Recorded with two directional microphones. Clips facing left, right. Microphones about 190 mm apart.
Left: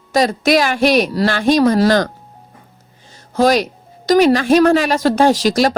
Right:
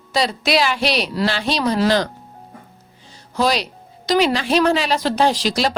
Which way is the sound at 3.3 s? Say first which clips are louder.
Left 6 dB; 45° left (ahead or behind).